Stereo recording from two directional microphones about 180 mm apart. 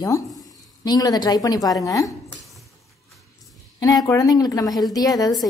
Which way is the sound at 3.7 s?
20° left (ahead or behind).